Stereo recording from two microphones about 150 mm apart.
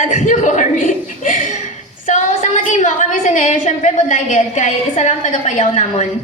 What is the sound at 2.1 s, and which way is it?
A woman's voice, 55° left (ahead or behind).